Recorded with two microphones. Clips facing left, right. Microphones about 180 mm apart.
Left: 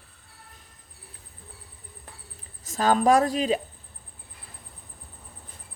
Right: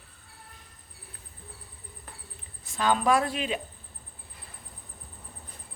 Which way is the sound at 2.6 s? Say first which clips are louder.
Left 4 dB; 40° left (ahead or behind).